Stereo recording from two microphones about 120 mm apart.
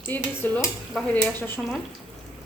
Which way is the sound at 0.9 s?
Centre (ahead or behind).